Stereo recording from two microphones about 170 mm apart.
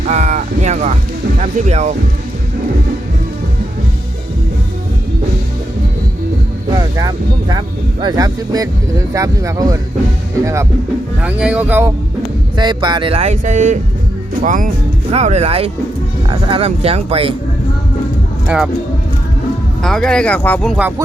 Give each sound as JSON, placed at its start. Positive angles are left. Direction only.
{"t": 0.1, "sound": "speech", "side_deg": -45}
{"t": 6.7, "sound": "speech", "side_deg": -20}
{"t": 11.2, "sound": "speech", "side_deg": -5}
{"t": 12.5, "sound": "speech", "side_deg": -25}
{"t": 18.4, "sound": "speech", "side_deg": -5}
{"t": 19.8, "sound": "speech", "side_deg": 5}